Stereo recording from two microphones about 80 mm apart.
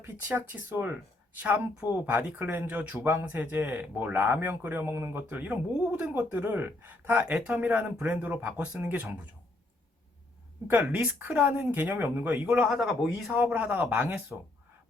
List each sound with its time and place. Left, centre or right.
0.0 s speech: right
10.7 s speech: centre
12.5 s speech: centre
13.3 s speech: right